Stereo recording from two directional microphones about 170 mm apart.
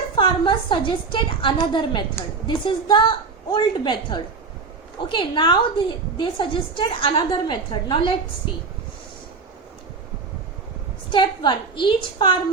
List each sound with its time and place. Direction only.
0.2 s a woman's voice: 30° left (ahead or behind)
11.1 s a woman's voice: 30° left (ahead or behind)